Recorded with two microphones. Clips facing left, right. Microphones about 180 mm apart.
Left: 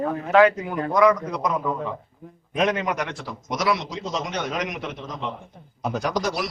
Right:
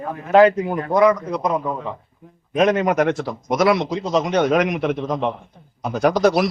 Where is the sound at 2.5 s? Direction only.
45° right (ahead or behind).